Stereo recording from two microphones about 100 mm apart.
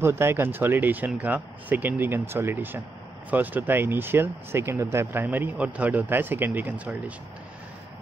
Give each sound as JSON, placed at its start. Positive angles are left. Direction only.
{"t": 0.0, "sound": "speech", "side_deg": -25}